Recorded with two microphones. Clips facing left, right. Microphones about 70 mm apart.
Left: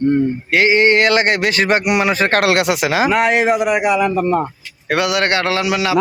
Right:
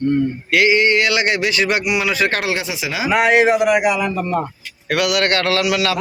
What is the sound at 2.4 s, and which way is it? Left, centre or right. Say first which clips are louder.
Speech: left 7 dB; left.